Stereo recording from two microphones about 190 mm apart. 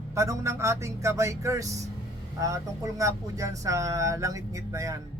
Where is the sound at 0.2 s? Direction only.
15° right (ahead or behind).